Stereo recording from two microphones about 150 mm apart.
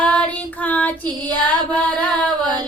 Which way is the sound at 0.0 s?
10° left (ahead or behind).